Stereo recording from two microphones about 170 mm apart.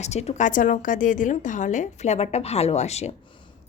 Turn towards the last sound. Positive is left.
turn(degrees=40)  # may be behind; listen again after turning